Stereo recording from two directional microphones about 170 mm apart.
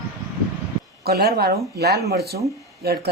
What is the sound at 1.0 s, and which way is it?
Speech, 70° right (ahead or behind).